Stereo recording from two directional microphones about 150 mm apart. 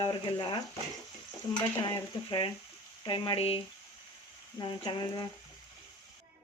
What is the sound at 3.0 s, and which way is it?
Speech, 30° left (ahead or behind).